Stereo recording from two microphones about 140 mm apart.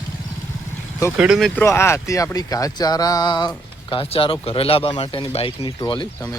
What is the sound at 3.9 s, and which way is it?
Speech, 40° left (ahead or behind).